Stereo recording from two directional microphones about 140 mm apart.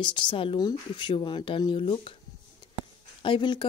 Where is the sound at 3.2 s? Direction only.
35° left (ahead or behind).